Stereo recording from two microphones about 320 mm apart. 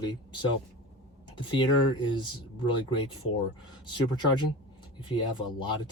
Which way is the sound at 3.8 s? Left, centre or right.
Centre.